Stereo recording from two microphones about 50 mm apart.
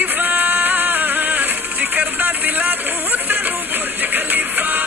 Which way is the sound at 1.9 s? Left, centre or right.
Right.